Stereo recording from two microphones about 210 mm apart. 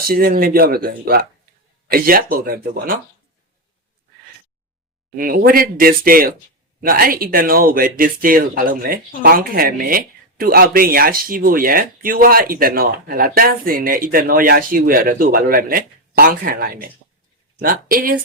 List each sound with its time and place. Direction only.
0.0 s speech: 45° right (ahead or behind)
5.1 s speech: 40° right (ahead or behind)